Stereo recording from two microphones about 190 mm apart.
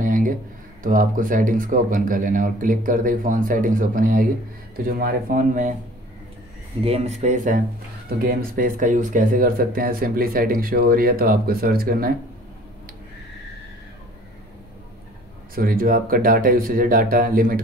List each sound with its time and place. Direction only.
0.0 s a sound: 45° right (ahead or behind)
0.8 s speech: 45° right (ahead or behind)
6.8 s speech: 30° right (ahead or behind); by 12.1 s 50° right (ahead or behind)
15.5 s speech: 50° right (ahead or behind)